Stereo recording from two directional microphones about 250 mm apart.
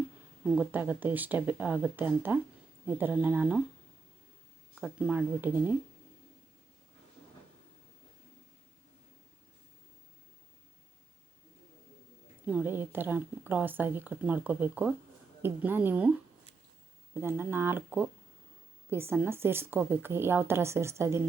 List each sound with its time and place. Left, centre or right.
0.5 s speech: centre
4.7 s speech: centre
12.5 s speech: centre
17.2 s speech: centre